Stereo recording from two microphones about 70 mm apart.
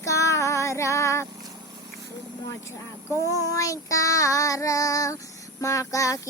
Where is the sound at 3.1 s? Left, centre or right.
Left.